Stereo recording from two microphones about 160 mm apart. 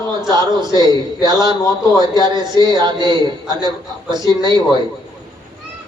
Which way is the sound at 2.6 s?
30° right (ahead or behind).